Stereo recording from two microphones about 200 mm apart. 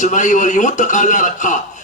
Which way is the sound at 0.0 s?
40° left (ahead or behind).